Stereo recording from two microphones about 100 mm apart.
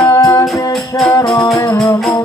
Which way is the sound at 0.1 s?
30° left (ahead or behind).